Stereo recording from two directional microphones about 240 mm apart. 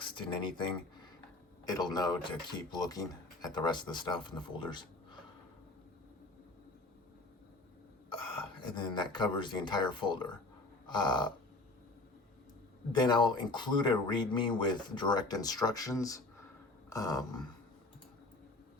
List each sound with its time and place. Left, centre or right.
0.0 s speech: centre
1.6 s speech: centre
8.7 s speech: centre
10.8 s a sound: centre
12.9 s speech: centre